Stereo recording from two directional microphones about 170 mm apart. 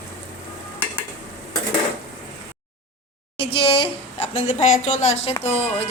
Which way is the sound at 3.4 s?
35° left (ahead or behind).